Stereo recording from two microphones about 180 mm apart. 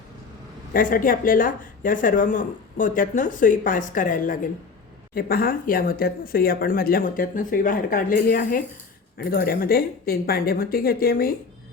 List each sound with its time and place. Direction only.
0.7 s speech: 50° left (ahead or behind)